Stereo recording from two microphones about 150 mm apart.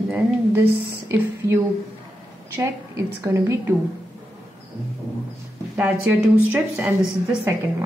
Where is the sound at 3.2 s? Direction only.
20° right (ahead or behind).